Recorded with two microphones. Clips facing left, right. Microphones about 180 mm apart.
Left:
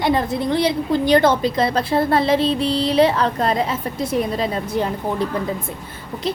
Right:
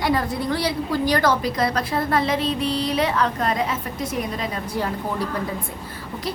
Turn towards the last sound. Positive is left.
turn(degrees=20)  # may be behind; listen again after turning